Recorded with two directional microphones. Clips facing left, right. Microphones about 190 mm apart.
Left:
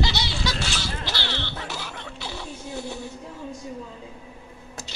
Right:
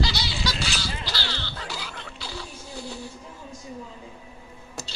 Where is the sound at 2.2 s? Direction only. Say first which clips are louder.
Left 3 dB; 20° left (ahead or behind).